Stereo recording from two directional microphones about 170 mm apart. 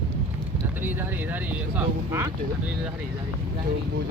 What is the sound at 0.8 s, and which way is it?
Speech, 10° right (ahead or behind).